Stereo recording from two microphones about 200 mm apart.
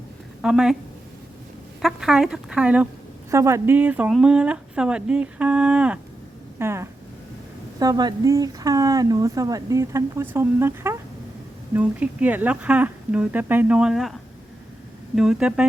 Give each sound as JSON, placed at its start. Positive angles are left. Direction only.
{"t": 0.4, "sound": "speech", "side_deg": -5}
{"t": 1.8, "sound": "speech", "side_deg": -5}
{"t": 15.1, "sound": "speech", "side_deg": -5}